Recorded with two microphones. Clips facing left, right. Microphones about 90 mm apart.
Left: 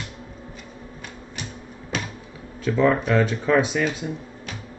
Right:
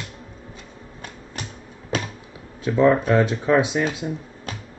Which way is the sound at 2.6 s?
20° right (ahead or behind).